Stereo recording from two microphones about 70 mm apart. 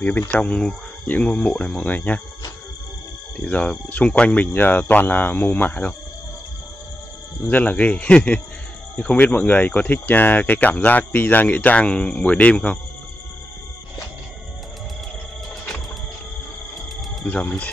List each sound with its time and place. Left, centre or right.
0.3 s speech: centre
3.3 s speech: centre
7.4 s speech: left
17.2 s speech: centre